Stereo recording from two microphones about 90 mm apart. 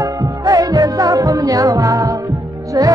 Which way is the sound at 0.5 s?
45° right (ahead or behind).